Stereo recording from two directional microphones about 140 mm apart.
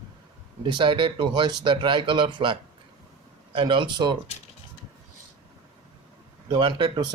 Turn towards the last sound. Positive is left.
turn(degrees=-35)  # may be behind; listen again after turning